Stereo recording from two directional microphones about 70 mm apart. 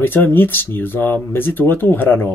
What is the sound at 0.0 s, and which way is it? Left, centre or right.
Speech, left.